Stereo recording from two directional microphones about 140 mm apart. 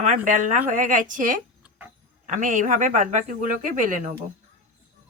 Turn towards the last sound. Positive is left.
turn(degrees=-70)  # may be behind; listen again after turning